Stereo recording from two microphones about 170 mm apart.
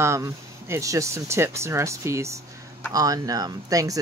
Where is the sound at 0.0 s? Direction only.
15° right (ahead or behind).